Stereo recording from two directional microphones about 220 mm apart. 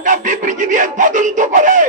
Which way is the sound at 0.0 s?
35° right (ahead or behind).